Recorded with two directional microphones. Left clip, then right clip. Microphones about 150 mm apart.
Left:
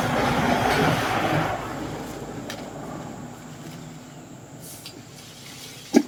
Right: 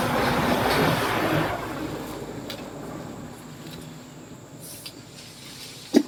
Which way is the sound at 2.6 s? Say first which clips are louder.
Left 1 dB; 20° right (ahead or behind).